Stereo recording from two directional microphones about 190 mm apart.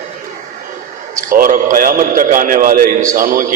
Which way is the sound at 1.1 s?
45° right (ahead or behind).